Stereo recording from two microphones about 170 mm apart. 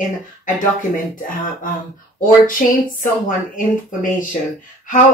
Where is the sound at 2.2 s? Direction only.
55° left (ahead or behind).